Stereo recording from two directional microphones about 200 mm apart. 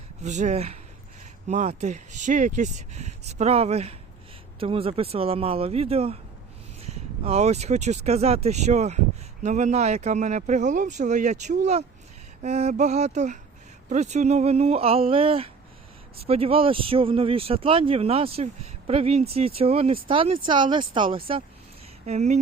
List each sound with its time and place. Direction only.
0.2 s speech: 35° right (ahead or behind)